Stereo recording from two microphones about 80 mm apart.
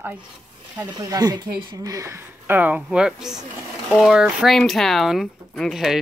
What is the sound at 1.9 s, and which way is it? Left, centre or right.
Speech, right.